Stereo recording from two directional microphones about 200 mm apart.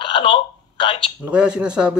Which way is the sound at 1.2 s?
5° right (ahead or behind).